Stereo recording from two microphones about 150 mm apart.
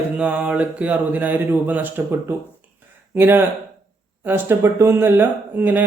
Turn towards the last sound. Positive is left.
turn(degrees=-10)  # may be behind; listen again after turning